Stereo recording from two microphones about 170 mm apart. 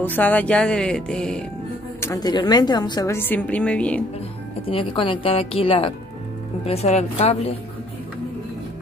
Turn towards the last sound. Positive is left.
turn(degrees=35)  # may be behind; listen again after turning